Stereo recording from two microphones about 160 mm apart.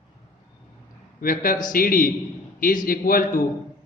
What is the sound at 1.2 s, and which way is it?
A man's voice, 60° left (ahead or behind).